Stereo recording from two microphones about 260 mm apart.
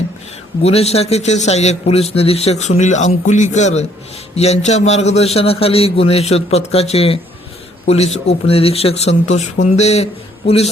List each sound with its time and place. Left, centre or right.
0.6 s a man's voice: left